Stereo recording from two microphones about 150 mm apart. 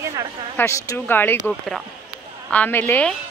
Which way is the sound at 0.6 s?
15° left (ahead or behind).